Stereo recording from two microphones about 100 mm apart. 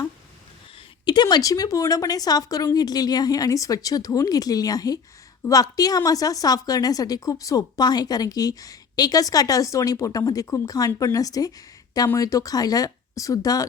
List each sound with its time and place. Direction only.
1.0 s a woman's voice: 45° left (ahead or behind)